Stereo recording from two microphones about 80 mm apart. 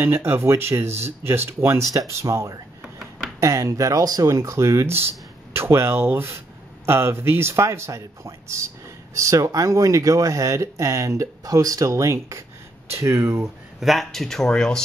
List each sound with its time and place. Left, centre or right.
0.0 s speech: right
2.8 s a sound: centre
3.3 s speech: right
13.7 s speech: centre